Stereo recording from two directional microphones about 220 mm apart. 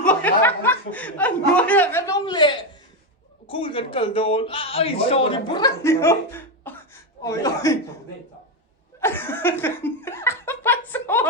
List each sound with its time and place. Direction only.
0.0 s a man's voice: 5° left (ahead or behind)
9.0 s laughter: 10° left (ahead or behind)